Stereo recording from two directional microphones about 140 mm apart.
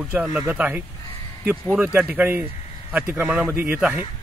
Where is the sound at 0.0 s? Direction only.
10° right (ahead or behind).